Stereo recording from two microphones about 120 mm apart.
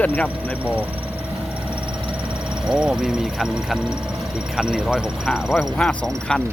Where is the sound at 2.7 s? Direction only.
5° right (ahead or behind).